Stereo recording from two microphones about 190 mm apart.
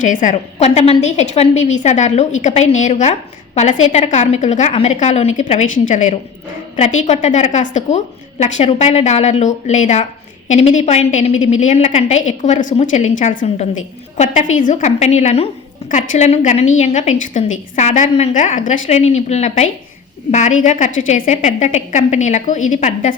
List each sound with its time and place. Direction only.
0.0 s a woman's voice: 40° left (ahead or behind)